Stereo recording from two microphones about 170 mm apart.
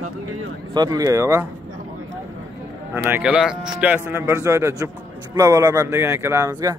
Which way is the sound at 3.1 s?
10° right (ahead or behind).